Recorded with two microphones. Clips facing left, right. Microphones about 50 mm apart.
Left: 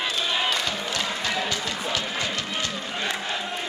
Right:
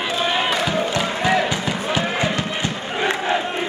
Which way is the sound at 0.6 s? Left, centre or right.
Right.